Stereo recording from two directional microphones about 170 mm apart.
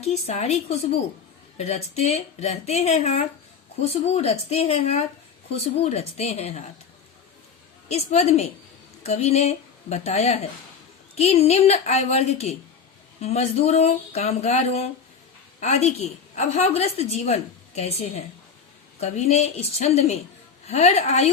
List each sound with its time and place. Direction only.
0.0 s a woman's voice: 40° left (ahead or behind)
7.9 s a woman's voice: 40° left (ahead or behind)